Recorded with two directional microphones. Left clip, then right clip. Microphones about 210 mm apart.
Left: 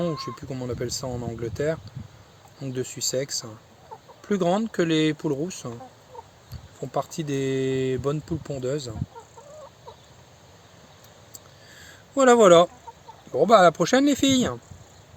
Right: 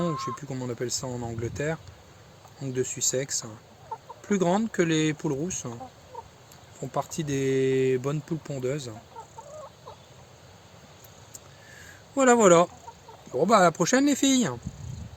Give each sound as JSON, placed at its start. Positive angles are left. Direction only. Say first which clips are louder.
{"t": 0.0, "sound": "speech", "louder": "left 1 dB", "side_deg": 20}
{"t": 6.9, "sound": "speech", "louder": "left 2 dB", "side_deg": 15}
{"t": 12.1, "sound": "speech", "louder": "left 4 dB", "side_deg": 20}